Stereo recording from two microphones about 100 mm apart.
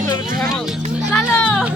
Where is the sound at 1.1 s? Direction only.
15° left (ahead or behind).